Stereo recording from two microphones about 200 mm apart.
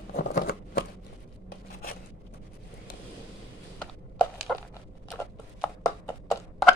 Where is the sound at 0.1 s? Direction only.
50° left (ahead or behind).